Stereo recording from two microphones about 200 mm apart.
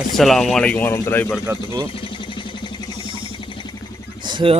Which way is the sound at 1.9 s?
25° left (ahead or behind).